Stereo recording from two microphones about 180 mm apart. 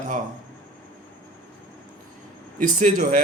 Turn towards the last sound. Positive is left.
turn(degrees=-45)  # may be behind; listen again after turning